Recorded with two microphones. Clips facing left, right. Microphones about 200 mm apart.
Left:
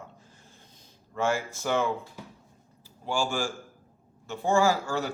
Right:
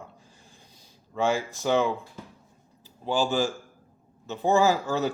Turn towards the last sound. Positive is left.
turn(degrees=-20)  # may be behind; listen again after turning